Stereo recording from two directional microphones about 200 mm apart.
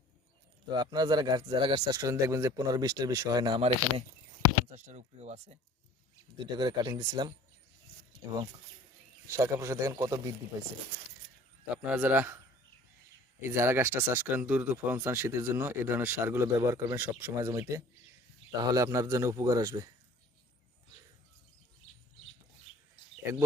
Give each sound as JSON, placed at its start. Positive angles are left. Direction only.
{"t": 0.7, "sound": "speech", "side_deg": -20}
{"t": 6.3, "sound": "speech", "side_deg": -20}
{"t": 9.2, "sound": "speech", "side_deg": -15}
{"t": 11.9, "sound": "speech", "side_deg": -5}
{"t": 13.5, "sound": "speech", "side_deg": -10}